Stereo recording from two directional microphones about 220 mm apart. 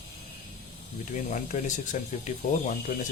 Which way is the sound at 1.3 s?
35° left (ahead or behind).